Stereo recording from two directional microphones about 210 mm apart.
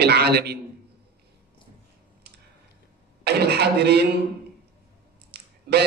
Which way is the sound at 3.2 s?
50° right (ahead or behind).